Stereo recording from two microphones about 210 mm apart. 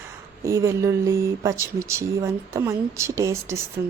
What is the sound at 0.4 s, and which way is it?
Speech, 15° right (ahead or behind).